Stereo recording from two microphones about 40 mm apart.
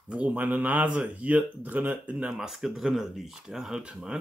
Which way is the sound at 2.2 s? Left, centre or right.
Centre.